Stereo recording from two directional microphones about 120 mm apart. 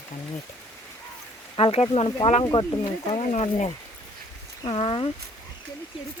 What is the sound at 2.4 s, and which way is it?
Speech, 45° left (ahead or behind).